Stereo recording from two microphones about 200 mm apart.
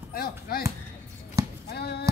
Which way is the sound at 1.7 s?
55° left (ahead or behind).